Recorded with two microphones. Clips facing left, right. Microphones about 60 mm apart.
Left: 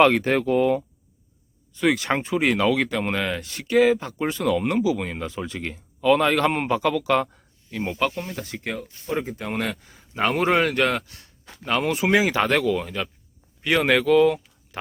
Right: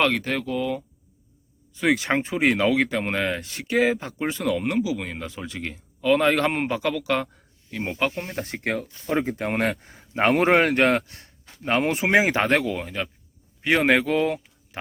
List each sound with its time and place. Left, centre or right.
0.0 s speech: left
1.7 s speech: centre
7.9 s speech: centre
8.2 s speech: right
11.7 s speech: right
12.6 s speech: centre